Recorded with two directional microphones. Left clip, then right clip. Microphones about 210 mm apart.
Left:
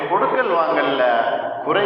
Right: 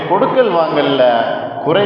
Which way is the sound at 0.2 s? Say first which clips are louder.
Right 5 dB; 55° right (ahead or behind).